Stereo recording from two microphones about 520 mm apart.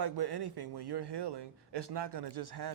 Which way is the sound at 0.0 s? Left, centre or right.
Right.